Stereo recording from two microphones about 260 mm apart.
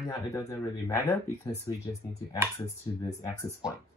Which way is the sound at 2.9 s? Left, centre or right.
Centre.